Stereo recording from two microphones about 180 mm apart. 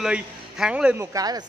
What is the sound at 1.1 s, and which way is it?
Speech, 20° right (ahead or behind).